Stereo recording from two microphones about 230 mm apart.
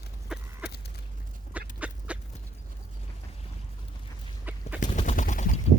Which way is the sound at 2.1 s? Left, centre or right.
Centre.